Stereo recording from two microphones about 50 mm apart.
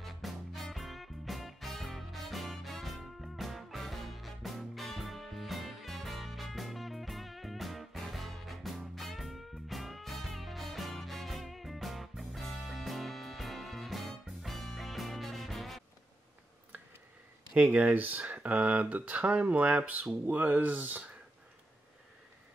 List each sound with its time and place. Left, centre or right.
0.0 s music: centre
17.7 s speech: right